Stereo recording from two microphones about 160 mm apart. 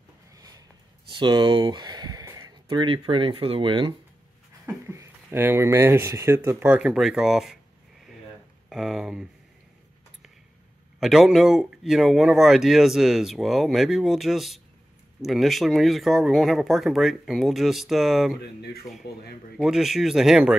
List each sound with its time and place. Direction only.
1.1 s speech: 30° right (ahead or behind)
4.6 s speech: 15° right (ahead or behind)
8.6 s speech: centre (ahead or behind)
11.0 s speech: centre (ahead or behind)
18.6 s speech: 75° left (ahead or behind)
19.5 s speech: centre (ahead or behind)